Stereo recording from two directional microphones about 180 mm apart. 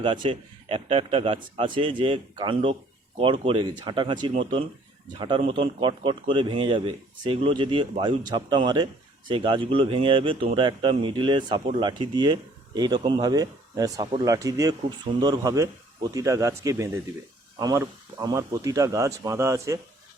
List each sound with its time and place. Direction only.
0.0 s speech: 25° right (ahead or behind)